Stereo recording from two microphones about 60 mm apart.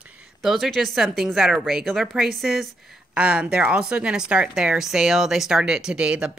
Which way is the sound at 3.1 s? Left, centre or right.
Centre.